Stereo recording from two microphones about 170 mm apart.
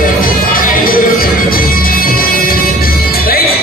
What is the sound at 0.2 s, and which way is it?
Music, 55° left (ahead or behind).